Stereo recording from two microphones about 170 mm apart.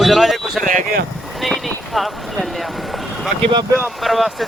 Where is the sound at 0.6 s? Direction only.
55° right (ahead or behind).